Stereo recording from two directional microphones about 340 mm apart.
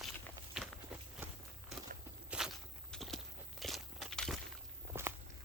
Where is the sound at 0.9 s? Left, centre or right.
Centre.